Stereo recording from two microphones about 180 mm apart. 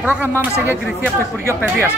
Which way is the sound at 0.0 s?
10° right (ahead or behind).